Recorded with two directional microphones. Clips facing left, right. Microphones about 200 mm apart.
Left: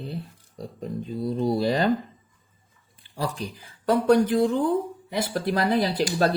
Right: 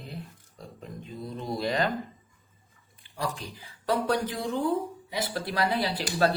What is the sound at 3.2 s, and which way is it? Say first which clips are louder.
A man's voice: left 4 dB; 45° left (ahead or behind).